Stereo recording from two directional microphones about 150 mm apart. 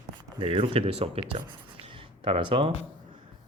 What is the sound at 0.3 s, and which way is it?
Speech, 35° right (ahead or behind).